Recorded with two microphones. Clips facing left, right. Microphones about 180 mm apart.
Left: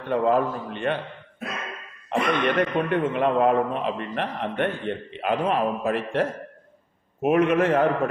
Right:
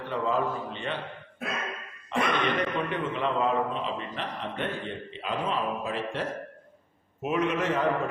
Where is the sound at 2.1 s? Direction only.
55° left (ahead or behind).